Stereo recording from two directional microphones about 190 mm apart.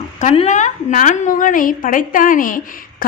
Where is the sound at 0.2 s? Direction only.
40° left (ahead or behind).